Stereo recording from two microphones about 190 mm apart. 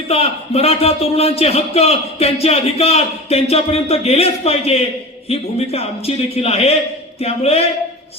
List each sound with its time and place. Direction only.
0.1 s a man's voice: 30° left (ahead or behind)